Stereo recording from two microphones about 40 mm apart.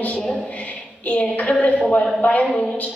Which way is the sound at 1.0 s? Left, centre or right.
Left.